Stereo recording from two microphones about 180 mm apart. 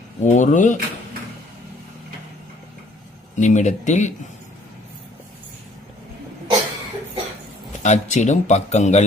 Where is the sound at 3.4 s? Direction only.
40° left (ahead or behind).